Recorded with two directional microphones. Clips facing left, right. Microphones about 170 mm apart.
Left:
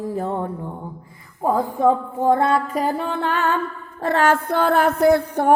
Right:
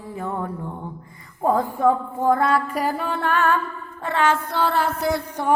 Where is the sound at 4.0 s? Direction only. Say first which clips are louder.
Left 3 dB; 40° left (ahead or behind); by 5.5 s 55° left (ahead or behind).